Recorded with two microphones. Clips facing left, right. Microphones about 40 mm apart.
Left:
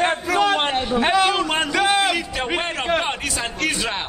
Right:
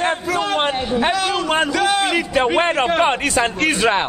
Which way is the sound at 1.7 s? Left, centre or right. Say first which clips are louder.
Right 1 dB; centre.